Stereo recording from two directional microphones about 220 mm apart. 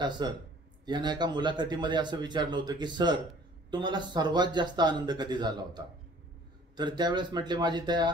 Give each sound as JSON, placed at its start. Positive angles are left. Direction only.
{"t": 0.2, "sound": "a man's voice", "side_deg": -20}